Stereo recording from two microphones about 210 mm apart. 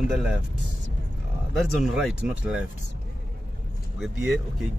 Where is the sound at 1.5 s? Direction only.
Centre (ahead or behind).